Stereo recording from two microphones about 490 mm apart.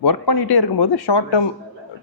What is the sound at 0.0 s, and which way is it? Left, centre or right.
Speech, left.